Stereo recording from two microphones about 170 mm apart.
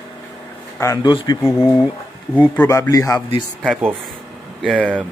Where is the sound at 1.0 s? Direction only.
25° left (ahead or behind).